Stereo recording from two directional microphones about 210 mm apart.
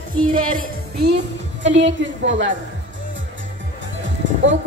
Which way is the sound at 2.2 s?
60° right (ahead or behind).